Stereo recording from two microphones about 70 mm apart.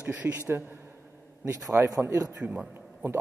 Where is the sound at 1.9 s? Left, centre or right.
Right.